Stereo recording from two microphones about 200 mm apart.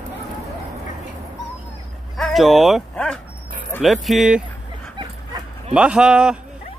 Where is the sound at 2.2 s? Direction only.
Centre (ahead or behind).